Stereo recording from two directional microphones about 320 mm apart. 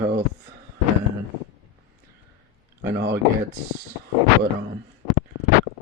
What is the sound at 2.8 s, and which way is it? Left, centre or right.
Speech, right.